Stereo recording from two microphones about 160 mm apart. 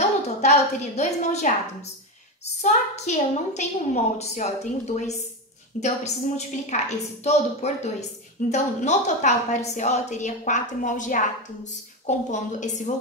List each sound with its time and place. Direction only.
0.4 s a woman's voice: 45° left (ahead or behind)